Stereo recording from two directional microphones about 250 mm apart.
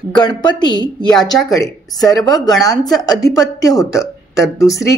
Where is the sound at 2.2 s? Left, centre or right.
Centre.